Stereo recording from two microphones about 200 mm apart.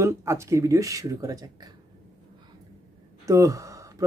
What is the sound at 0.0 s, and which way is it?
Speech, 15° right (ahead or behind).